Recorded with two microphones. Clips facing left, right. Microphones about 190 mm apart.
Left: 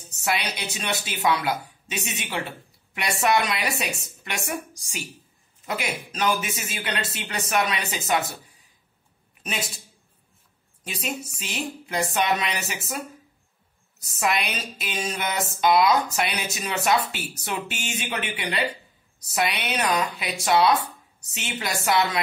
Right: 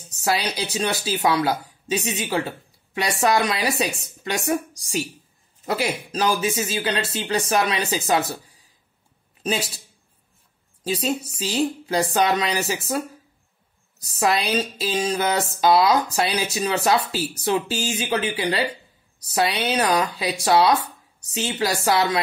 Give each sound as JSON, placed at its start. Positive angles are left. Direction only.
{"t": 0.2, "sound": "speech", "side_deg": -35}
{"t": 10.8, "sound": "speech", "side_deg": -30}
{"t": 14.2, "sound": "speech", "side_deg": -30}